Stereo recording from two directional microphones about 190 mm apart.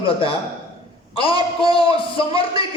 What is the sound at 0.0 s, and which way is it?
Speech, 30° left (ahead or behind).